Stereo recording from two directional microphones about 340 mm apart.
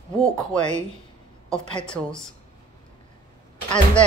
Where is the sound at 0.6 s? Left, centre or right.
Centre.